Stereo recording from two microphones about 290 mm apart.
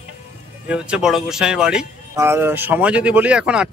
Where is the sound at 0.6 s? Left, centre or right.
Centre.